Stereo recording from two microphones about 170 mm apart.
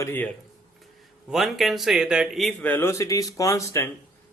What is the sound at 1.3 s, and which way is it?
Speech, centre (ahead or behind).